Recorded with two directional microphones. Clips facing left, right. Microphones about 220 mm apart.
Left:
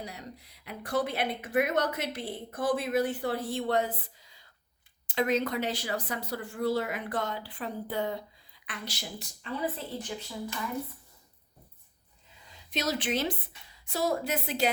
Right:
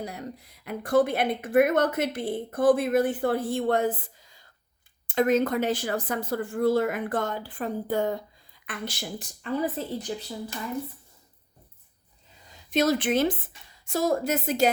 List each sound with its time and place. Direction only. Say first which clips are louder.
0.0 s a woman's voice: right 6 dB; 50° right (ahead or behind)
12.7 s a woman's voice: right 8 dB; 50° right (ahead or behind)